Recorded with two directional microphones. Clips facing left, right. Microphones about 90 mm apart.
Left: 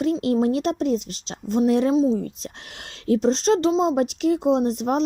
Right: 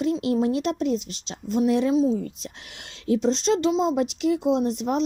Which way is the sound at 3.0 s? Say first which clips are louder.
Left 3 dB; 45° left (ahead or behind).